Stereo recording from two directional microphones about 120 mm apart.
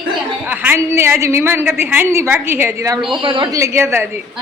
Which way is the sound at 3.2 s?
40° right (ahead or behind).